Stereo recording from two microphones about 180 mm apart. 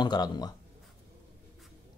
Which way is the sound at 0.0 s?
25° left (ahead or behind).